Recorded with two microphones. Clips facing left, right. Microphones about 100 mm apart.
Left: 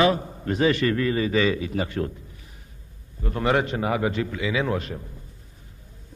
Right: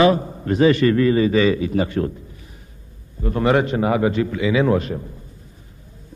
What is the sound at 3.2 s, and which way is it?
A man's voice, 30° right (ahead or behind).